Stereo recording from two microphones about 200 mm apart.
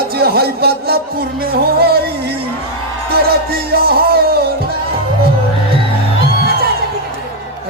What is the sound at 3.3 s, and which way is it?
Music, 50° right (ahead or behind).